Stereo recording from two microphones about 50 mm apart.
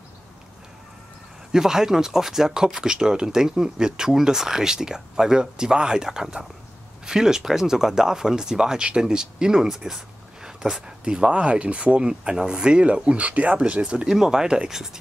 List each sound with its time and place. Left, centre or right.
1.5 s speech: centre
14.0 s speech: centre